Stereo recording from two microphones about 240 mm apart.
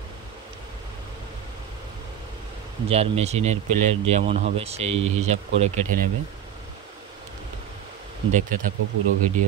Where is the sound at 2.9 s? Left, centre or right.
Right.